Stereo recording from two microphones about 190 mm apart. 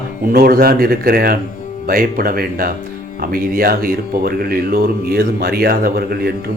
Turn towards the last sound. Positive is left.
turn(degrees=-55)  # may be behind; listen again after turning